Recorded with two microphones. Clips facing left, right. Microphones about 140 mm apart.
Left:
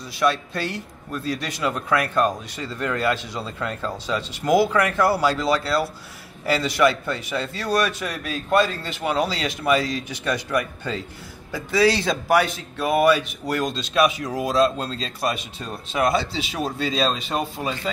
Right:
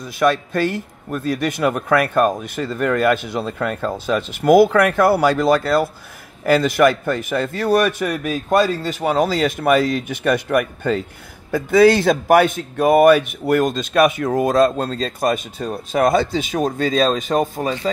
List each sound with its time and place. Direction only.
0.0 s a man's voice: 50° right (ahead or behind)